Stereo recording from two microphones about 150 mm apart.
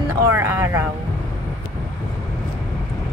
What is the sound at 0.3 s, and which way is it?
Speech, 15° right (ahead or behind).